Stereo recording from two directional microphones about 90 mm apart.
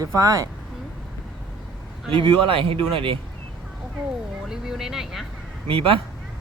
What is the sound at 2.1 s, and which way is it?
Speech, 85° right.